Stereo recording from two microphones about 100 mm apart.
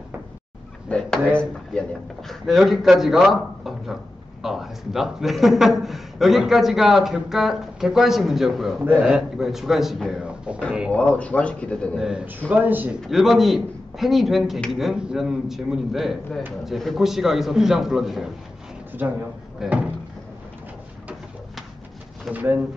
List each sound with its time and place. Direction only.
0.8 s speech: 10° left (ahead or behind)
10.2 s a sound: 10° right (ahead or behind)
10.9 s speech: 15° left (ahead or behind)
12.0 s a man's voice: 10° right (ahead or behind)
12.4 s speech: 20° right (ahead or behind)
13.0 s speech: centre (ahead or behind)
19.6 s speech: 5° right (ahead or behind)
22.3 s a man's voice: 15° right (ahead or behind)